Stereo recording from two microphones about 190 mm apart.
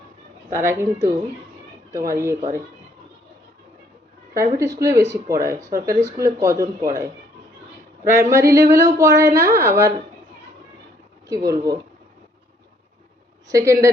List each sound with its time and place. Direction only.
0.5 s speech: 15° right (ahead or behind)
2.0 s speech: 15° right (ahead or behind)
4.4 s speech: 15° right (ahead or behind)
11.3 s speech: 20° right (ahead or behind)
13.5 s speech: 15° right (ahead or behind)